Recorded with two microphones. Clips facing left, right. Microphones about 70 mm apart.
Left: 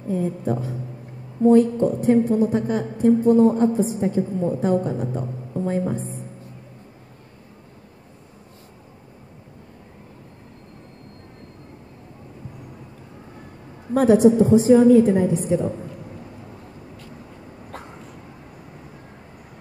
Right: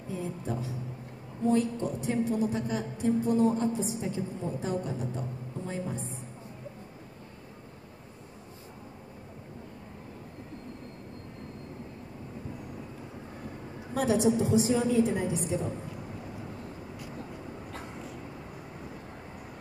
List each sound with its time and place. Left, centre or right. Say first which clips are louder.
0.1 s a woman's voice: left 11 dB; left
13.9 s a woman's voice: left 11 dB; left